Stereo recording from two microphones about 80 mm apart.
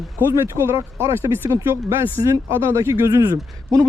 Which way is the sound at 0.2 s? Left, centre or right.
Right.